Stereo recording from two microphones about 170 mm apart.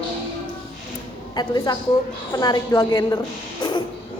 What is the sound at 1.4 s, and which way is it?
A woman's voice, 25° left (ahead or behind).